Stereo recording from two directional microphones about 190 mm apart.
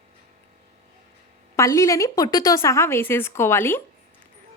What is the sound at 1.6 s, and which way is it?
A woman's voice, 15° left (ahead or behind).